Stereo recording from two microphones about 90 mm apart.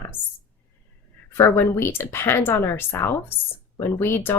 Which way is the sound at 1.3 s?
25° left (ahead or behind).